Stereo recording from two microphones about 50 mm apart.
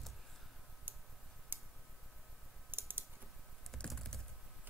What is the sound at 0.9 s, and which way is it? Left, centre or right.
Tick, right.